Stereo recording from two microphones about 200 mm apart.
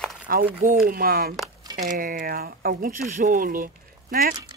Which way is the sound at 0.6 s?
40° right (ahead or behind).